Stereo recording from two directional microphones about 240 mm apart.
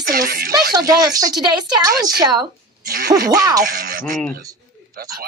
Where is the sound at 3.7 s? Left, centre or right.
Right.